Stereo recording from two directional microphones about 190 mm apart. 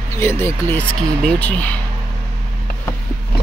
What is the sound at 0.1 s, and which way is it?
Speech, 15° left (ahead or behind).